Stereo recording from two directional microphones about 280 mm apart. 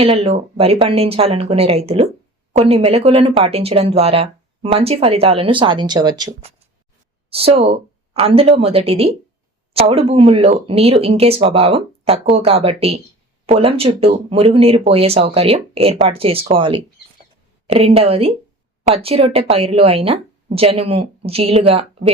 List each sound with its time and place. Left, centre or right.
0.0 s speech: right